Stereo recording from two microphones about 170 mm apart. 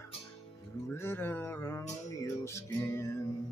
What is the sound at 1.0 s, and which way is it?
Music, 15° left (ahead or behind).